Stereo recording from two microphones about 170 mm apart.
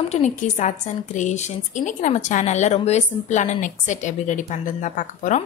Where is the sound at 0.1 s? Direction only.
45° left (ahead or behind).